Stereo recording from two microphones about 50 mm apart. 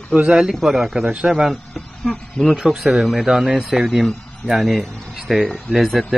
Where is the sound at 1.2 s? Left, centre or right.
Centre.